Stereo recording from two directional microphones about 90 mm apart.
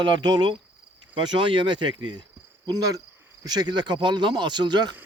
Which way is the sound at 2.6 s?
45° right (ahead or behind).